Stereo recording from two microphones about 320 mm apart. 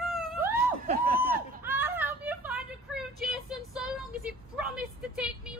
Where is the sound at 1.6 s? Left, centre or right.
Centre.